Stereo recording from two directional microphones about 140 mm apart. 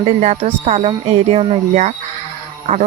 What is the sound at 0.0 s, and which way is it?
Speech, 50° right (ahead or behind).